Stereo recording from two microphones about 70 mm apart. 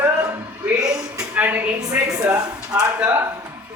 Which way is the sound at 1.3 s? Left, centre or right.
Right.